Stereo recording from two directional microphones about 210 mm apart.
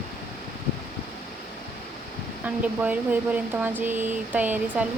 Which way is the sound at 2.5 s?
5° right (ahead or behind).